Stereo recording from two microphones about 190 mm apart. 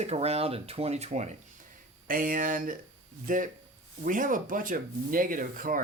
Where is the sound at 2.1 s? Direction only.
45° right (ahead or behind).